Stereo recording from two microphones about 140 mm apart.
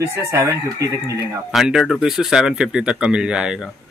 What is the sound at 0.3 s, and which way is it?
Speech, 20° right (ahead or behind).